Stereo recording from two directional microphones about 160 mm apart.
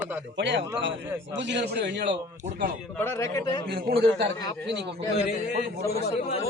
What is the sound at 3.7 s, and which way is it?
Speech, 70° right (ahead or behind).